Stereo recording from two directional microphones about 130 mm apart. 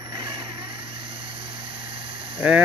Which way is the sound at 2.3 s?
10° right (ahead or behind).